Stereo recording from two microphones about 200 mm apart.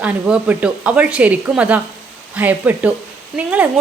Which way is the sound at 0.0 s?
5° right (ahead or behind).